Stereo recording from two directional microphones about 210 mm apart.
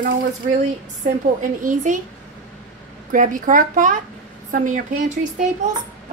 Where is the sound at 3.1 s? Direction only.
40° right (ahead or behind).